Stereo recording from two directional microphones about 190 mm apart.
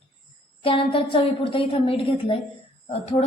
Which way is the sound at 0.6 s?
30° left (ahead or behind).